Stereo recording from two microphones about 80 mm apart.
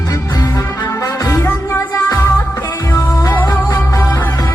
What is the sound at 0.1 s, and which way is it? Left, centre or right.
Music, left.